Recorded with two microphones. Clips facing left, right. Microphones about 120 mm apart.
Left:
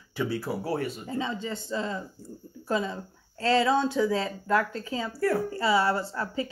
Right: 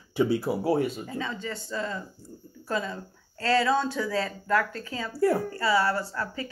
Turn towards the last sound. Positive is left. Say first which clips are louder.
# left 1 dB
turn(degrees=20)  # may be behind; listen again after turning